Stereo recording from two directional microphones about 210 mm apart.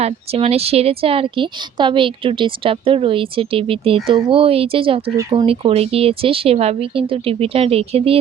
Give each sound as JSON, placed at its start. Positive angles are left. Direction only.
{"t": 0.0, "sound": "speech", "side_deg": -30}